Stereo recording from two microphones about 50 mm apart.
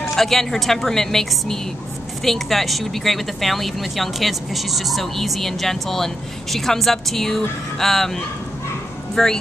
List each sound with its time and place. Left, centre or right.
0.1 s speech: centre